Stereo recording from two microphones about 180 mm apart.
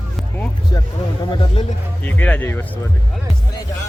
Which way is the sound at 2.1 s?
10° left (ahead or behind).